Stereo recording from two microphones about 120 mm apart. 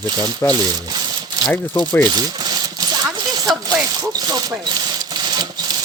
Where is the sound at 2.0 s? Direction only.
35° right (ahead or behind).